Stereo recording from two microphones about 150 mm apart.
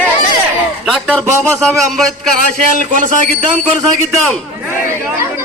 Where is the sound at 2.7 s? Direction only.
55° right (ahead or behind).